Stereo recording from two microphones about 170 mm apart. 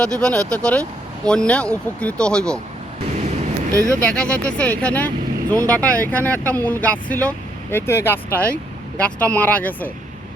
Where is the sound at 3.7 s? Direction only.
20° right (ahead or behind).